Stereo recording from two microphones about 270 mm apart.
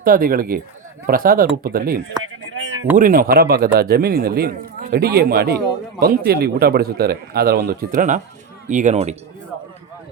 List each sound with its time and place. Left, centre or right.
0.0 s a man's voice: right
2.2 s a sound: right
2.9 s a man's voice: right